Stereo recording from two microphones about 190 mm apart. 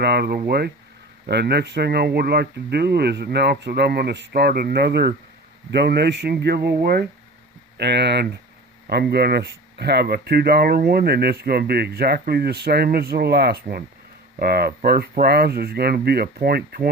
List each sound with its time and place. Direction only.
0.0 s speech: 60° right (ahead or behind)